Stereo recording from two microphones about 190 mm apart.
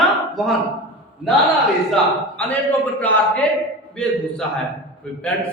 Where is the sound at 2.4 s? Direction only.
10° left (ahead or behind).